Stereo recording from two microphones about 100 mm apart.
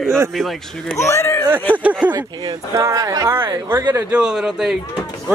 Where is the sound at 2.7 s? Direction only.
35° right (ahead or behind).